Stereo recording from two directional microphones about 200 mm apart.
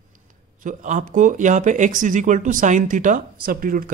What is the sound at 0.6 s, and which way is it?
Speech, 40° right (ahead or behind).